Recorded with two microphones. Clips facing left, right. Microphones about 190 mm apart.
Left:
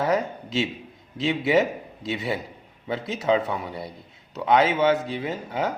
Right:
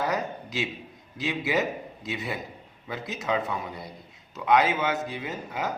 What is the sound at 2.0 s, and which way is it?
Speech, 30° left (ahead or behind).